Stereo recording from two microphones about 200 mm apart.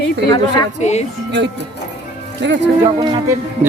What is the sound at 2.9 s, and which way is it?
Speech, 25° right (ahead or behind).